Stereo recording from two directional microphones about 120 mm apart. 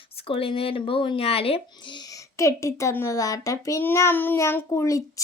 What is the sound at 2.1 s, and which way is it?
A child's voice, 25° left (ahead or behind).